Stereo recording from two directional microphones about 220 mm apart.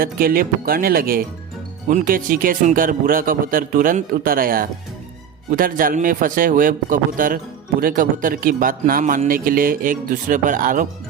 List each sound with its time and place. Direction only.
0.0 s a man's voice: 40° right (ahead or behind)